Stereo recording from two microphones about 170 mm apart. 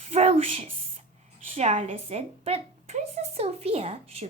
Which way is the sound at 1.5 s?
35° right (ahead or behind).